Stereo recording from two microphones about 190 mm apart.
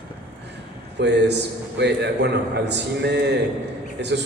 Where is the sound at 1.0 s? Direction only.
65° right (ahead or behind).